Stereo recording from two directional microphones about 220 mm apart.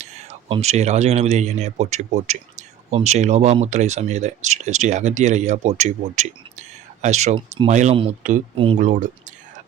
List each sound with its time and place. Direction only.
0.0 s speech: 30° right (ahead or behind)